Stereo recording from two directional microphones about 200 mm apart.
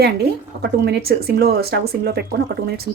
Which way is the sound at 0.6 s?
55° right (ahead or behind).